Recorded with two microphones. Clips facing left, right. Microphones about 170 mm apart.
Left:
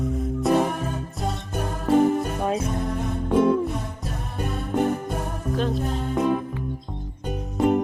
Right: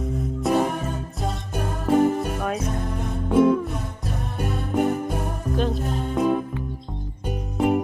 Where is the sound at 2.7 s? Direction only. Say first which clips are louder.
Left 2 dB; centre (ahead or behind).